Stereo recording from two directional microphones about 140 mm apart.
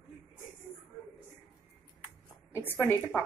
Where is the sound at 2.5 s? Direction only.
15° left (ahead or behind).